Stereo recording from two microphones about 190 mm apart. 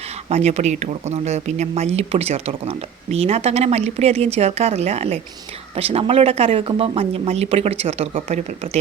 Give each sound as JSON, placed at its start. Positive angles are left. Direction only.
{"t": 0.3, "sound": "speech", "side_deg": -35}